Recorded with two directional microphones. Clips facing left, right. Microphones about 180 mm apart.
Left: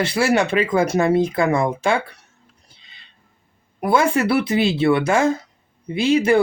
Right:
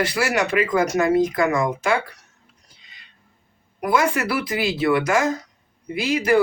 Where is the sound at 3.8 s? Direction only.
30° left (ahead or behind).